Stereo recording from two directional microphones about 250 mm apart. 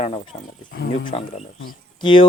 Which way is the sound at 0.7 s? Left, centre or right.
Left.